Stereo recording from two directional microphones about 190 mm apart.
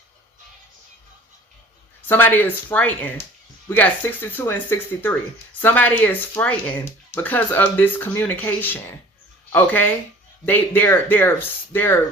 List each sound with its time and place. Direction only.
2.0 s speech: 10° left (ahead or behind)